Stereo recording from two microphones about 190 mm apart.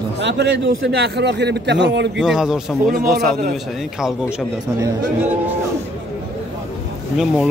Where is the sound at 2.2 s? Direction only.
Centre (ahead or behind).